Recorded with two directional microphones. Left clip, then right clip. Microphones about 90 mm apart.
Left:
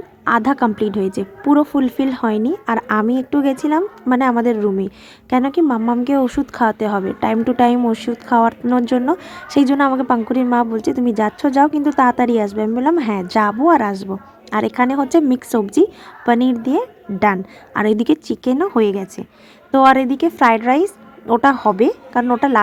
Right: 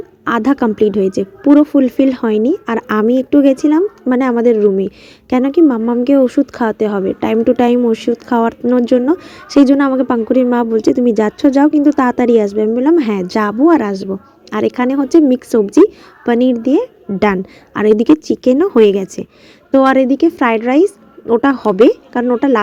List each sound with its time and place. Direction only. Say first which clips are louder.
0.3 s speech: right 1 dB; 30° right (ahead or behind)
1.5 s speech: right 5 dB; 15° right (ahead or behind)
13.0 s a woman's voice: right 4 dB; 35° right (ahead or behind)
13.2 s speech: right 2 dB; 25° right (ahead or behind)
17.2 s a woman's voice: right 2 dB; 40° right (ahead or behind)
17.7 s speech: right 6 dB; 20° right (ahead or behind)
18.4 s a woman's voice: right 7 dB; 35° right (ahead or behind)
19.7 s speech: right 1 dB; 15° right (ahead or behind)
21.8 s speech: right 6 dB; 35° right (ahead or behind)
22.2 s speech: right 1 dB; 20° right (ahead or behind)